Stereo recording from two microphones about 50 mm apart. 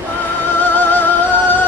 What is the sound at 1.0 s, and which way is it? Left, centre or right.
Music, left.